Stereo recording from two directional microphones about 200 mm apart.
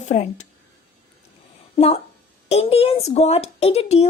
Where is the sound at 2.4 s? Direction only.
30° left (ahead or behind).